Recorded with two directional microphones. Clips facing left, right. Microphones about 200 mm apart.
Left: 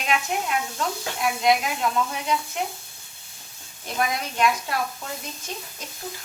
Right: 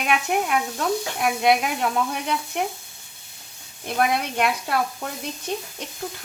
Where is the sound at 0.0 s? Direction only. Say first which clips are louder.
Right 3 dB; 55° right (ahead or behind).